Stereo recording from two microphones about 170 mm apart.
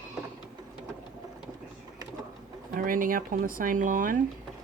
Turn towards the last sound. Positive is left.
turn(degrees=-50)  # may be behind; listen again after turning